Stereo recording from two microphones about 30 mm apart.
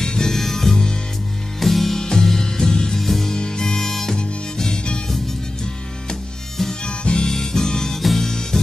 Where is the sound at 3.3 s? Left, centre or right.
Left.